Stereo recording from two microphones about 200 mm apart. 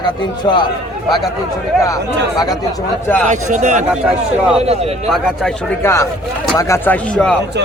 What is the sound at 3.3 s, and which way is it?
Speech, 35° right (ahead or behind).